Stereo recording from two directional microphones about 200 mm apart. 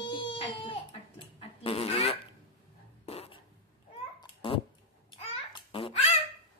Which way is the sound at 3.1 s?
30° left (ahead or behind).